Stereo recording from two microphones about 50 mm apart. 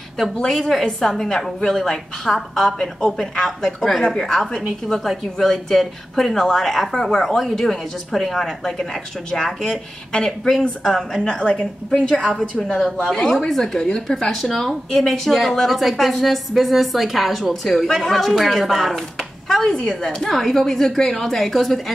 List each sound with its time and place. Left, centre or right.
0.5 s a woman's voice: centre
11.2 s a woman's voice: centre